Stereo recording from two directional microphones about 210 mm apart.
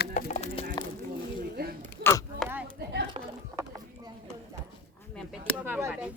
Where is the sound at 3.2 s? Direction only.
25° right (ahead or behind).